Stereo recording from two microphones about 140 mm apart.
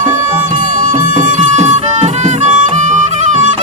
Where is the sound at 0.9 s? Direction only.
65° right (ahead or behind).